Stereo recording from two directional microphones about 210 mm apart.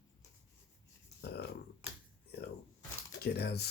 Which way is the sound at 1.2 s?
50° left (ahead or behind).